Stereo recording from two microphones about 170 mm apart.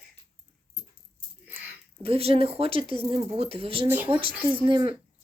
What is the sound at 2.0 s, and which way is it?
Speech, 35° right (ahead or behind).